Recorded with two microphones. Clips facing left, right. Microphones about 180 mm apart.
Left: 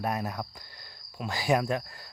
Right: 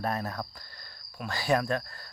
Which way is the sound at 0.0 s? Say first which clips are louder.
Left 1 dB; 15° left (ahead or behind).